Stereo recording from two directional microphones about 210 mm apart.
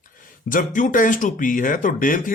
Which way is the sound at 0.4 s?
40° left (ahead or behind).